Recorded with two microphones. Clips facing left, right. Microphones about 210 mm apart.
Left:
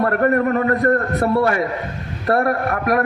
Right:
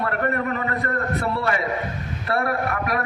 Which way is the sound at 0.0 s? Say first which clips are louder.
Left 7 dB; 45° left (ahead or behind).